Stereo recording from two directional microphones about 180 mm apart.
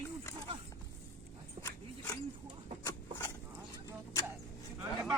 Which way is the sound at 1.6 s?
15° left (ahead or behind).